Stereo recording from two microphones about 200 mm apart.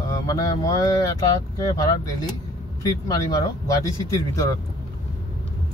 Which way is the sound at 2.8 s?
20° left (ahead or behind).